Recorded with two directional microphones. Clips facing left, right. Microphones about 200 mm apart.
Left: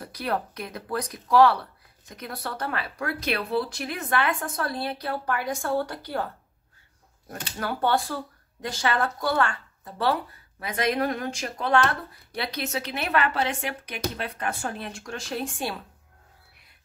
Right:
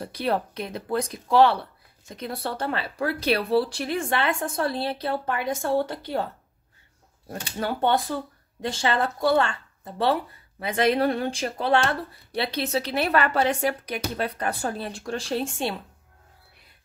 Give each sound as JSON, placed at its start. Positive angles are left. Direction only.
{"t": 0.0, "sound": "speech", "side_deg": -30}
{"t": 7.2, "sound": "speech", "side_deg": -25}